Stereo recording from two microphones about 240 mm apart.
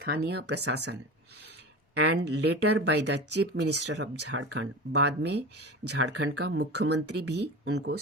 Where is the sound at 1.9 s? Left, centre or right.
Right.